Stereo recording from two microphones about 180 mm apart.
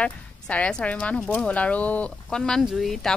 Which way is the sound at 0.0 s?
5° left (ahead or behind).